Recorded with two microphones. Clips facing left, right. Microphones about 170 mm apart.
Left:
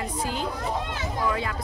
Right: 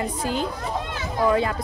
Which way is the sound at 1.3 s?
35° right (ahead or behind).